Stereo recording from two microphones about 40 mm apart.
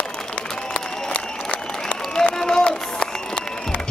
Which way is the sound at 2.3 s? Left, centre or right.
Centre.